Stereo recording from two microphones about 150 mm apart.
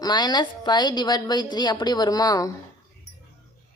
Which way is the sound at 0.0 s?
30° left (ahead or behind).